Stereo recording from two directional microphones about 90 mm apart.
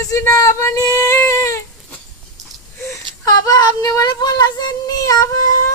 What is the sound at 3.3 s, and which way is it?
Child singing, 45° left (ahead or behind).